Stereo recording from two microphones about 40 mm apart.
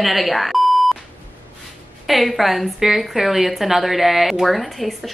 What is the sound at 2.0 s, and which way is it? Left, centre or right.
Speech, centre.